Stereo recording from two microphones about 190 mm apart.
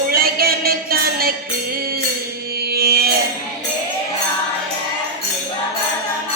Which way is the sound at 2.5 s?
55° right (ahead or behind).